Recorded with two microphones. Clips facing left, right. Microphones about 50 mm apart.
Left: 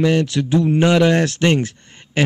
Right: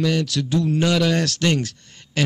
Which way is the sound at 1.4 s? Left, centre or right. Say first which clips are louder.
Left 4 dB; left.